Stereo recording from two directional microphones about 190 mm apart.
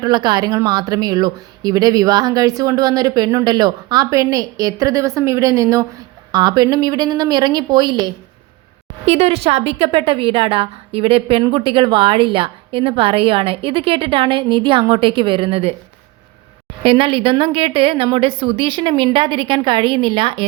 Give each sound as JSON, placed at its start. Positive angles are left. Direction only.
{"t": 0.0, "sound": "a woman's voice", "side_deg": -25}
{"t": 16.8, "sound": "a woman's voice", "side_deg": -30}